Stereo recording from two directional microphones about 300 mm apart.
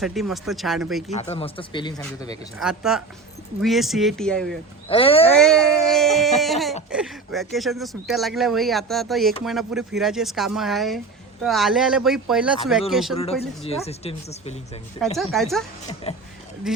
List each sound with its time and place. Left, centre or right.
0.0 s speech: centre
1.1 s speech: left
2.6 s speech: centre
4.9 s speech: centre
5.4 s speech: centre
13.6 s speech: centre
15.2 s speech: centre
16.1 s speech: centre
16.7 s speech: centre